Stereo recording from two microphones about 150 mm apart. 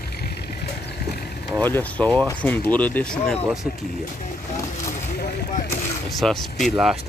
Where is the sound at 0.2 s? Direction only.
90° left.